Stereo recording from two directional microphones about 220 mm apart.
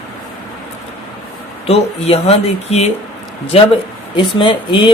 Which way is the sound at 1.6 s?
25° left (ahead or behind).